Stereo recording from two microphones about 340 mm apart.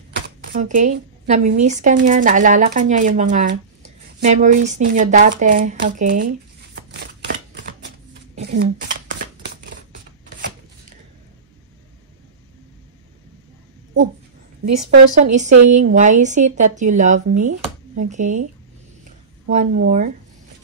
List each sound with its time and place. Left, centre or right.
0.6 s a woman's voice: right
6.9 s shuffling cards: right
8.4 s a sound: right
9.1 s scissors: right
14.6 s a woman's voice: right
19.5 s a woman's voice: right